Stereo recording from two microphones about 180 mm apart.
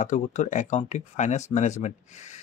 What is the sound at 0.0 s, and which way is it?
Speech, 40° left (ahead or behind).